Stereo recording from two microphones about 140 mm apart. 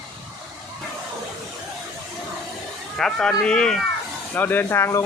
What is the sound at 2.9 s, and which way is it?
Speech, 5° left (ahead or behind).